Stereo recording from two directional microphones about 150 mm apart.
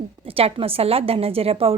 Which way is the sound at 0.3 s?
40° right (ahead or behind).